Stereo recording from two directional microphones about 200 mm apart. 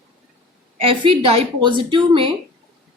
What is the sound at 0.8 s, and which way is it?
A woman's voice, 25° right (ahead or behind).